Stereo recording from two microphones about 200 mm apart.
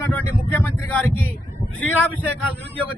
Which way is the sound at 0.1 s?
10° left (ahead or behind).